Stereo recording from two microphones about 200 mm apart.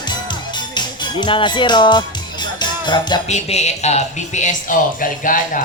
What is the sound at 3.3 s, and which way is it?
A man's voice, 35° left (ahead or behind).